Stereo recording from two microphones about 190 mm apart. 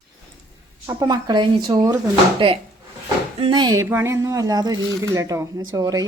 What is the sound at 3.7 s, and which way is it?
Speech, 10° right (ahead or behind).